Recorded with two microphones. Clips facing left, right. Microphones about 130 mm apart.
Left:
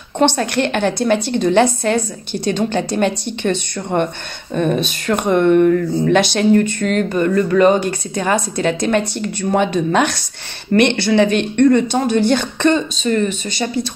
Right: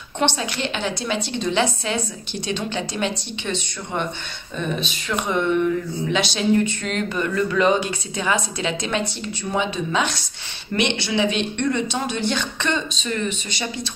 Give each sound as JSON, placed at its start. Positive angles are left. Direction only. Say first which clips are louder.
{"t": 0.2, "sound": "speech", "louder": "left 8 dB", "side_deg": 55}